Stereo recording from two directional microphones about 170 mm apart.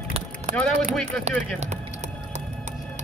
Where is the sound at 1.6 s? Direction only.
40° right (ahead or behind).